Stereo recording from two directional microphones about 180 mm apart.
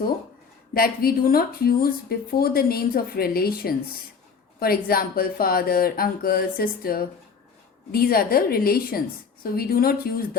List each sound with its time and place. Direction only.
0.7 s speech: 55° left (ahead or behind)